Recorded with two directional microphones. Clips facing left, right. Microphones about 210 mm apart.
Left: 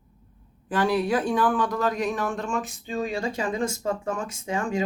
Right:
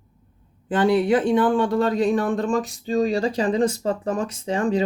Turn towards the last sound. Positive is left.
turn(degrees=-35)  # may be behind; listen again after turning